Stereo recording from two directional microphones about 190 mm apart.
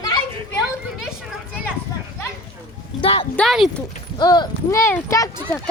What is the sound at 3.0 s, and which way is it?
Speech, 30° left (ahead or behind).